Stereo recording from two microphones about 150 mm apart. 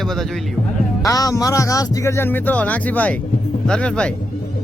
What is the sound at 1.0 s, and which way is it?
Speech, 20° left (ahead or behind).